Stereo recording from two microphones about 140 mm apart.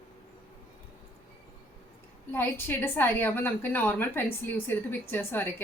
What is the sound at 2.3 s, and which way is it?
A woman's voice, 15° left (ahead or behind).